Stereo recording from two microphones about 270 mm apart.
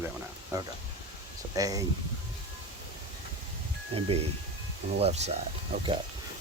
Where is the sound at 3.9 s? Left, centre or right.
Right.